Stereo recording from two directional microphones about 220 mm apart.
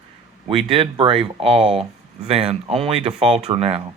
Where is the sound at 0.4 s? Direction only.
25° right (ahead or behind).